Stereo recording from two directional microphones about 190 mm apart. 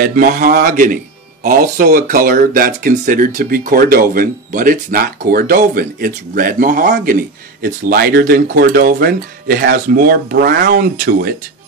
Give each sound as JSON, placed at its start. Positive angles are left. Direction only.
{"t": 0.0, "sound": "speech", "side_deg": -45}